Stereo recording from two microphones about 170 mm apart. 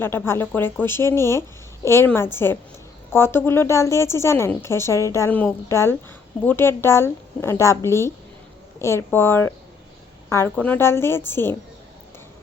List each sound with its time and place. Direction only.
0.0 s a woman's voice: 15° left (ahead or behind)